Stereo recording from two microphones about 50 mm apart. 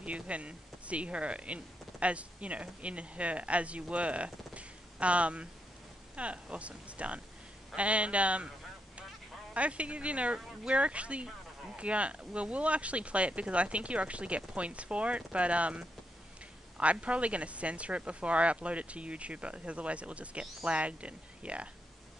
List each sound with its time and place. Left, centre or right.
0.0 s speech: right
9.5 s speech: right